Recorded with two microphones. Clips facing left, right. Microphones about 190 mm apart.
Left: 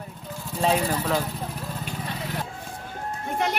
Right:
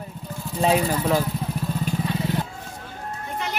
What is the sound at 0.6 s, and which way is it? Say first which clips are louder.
Speech: right 3 dB; 10° right (ahead or behind).